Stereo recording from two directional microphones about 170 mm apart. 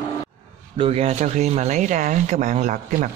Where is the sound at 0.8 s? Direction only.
35° right (ahead or behind).